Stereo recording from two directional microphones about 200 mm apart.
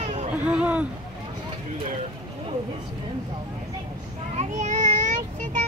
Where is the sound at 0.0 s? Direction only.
35° right (ahead or behind).